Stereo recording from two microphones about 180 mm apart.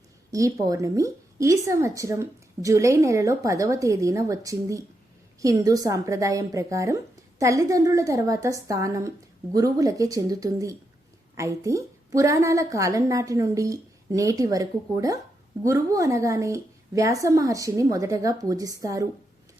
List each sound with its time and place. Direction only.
0.3 s a woman's voice: 15° right (ahead or behind)